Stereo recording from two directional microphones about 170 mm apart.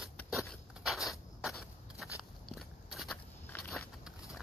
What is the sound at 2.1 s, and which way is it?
Biting, centre (ahead or behind).